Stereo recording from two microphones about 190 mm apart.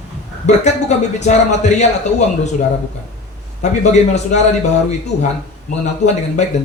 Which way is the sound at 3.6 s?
40° left (ahead or behind).